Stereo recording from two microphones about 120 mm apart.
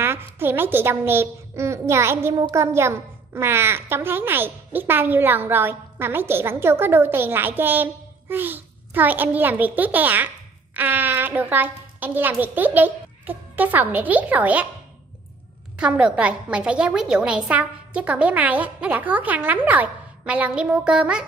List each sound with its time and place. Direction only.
0.0 s a child's voice: 20° right (ahead or behind)
15.8 s a child's voice: 10° right (ahead or behind)